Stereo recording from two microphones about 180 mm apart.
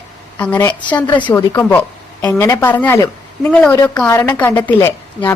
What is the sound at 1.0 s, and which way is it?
A woman's voice, 25° left (ahead or behind).